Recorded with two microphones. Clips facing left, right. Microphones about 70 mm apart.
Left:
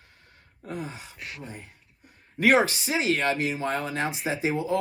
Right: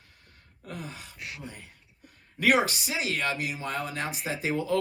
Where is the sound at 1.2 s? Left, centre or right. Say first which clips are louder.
Left 1 dB; centre.